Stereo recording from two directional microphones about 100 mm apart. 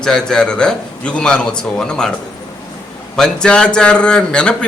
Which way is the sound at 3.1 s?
5° left (ahead or behind).